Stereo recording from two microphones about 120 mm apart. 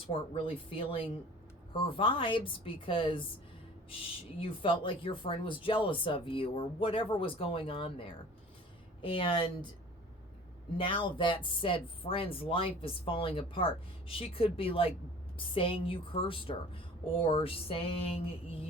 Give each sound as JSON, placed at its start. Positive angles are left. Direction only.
{"t": 0.1, "sound": "speech", "side_deg": 45}
{"t": 4.4, "sound": "speech", "side_deg": 45}
{"t": 10.8, "sound": "speech", "side_deg": 45}